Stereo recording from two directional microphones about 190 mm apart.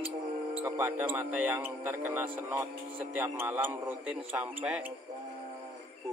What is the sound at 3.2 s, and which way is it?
Speech, 10° right (ahead or behind).